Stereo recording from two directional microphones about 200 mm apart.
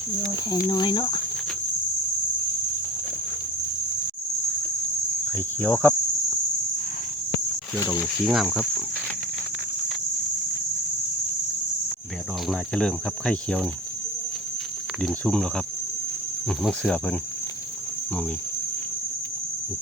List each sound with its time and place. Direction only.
0.7 s speech: 20° left (ahead or behind)
5.3 s speech: 10° left (ahead or behind)
8.2 s speech: centre (ahead or behind)
12.5 s speech: 5° left (ahead or behind)
15.0 s speech: centre (ahead or behind)
16.6 s speech: 5° left (ahead or behind)